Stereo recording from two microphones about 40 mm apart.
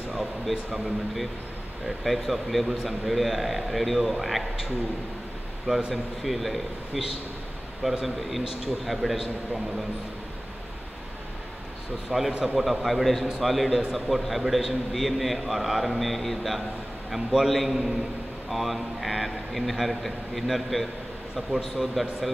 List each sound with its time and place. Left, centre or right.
0.8 s a man's voice: centre
5.7 s speech: right
6.2 s a man's voice: centre
8.0 s a man's voice: centre
12.1 s a man's voice: centre